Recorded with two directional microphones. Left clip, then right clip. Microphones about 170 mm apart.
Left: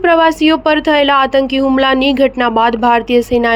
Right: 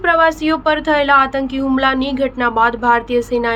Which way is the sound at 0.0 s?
40° left (ahead or behind).